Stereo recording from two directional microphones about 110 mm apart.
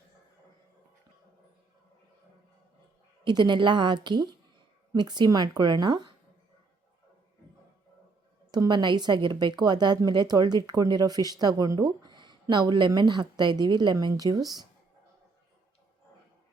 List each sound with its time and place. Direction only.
3.2 s a woman's voice: 45° right (ahead or behind)
8.4 s a woman's voice: 40° right (ahead or behind)